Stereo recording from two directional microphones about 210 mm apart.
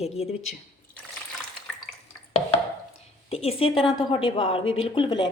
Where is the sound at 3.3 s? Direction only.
30° left (ahead or behind).